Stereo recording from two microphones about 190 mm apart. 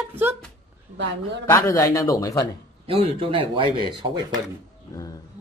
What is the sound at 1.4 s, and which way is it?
Speech, 15° left (ahead or behind).